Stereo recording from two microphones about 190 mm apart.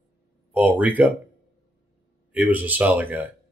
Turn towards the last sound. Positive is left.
turn(degrees=-10)  # may be behind; listen again after turning